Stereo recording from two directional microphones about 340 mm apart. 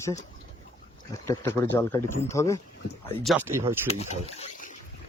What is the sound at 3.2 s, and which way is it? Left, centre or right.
Speech, centre.